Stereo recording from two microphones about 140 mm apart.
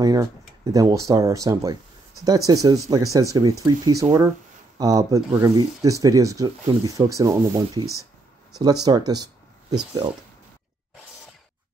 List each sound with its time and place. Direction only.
0.0 s speech: 25° right (ahead or behind)